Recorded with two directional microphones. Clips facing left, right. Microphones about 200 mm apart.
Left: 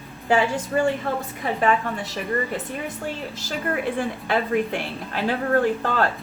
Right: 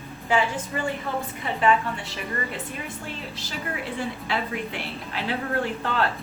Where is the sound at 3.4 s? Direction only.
50° left (ahead or behind).